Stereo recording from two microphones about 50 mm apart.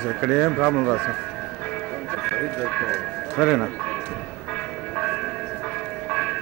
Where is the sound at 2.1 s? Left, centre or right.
Centre.